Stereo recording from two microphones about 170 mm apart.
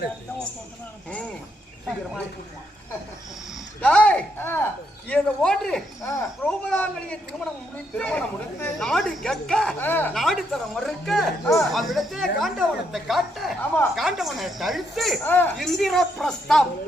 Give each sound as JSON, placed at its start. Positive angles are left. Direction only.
{"t": 3.8, "sound": "speech", "side_deg": 10}
{"t": 6.0, "sound": "speech", "side_deg": 20}
{"t": 6.4, "sound": "speech", "side_deg": 5}
{"t": 10.2, "sound": "speech", "side_deg": 0}
{"t": 15.2, "sound": "speech", "side_deg": 10}
{"t": 15.5, "sound": "speech", "side_deg": 0}